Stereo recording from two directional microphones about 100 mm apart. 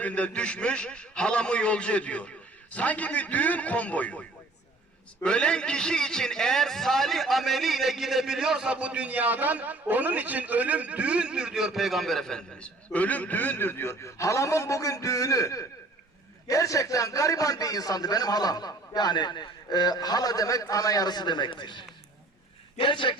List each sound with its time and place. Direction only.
0.0 s a man's voice: 15° left (ahead or behind); by 23.1 s 55° left (ahead or behind)